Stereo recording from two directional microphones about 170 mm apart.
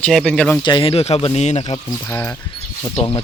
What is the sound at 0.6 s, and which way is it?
Speech, 30° left (ahead or behind).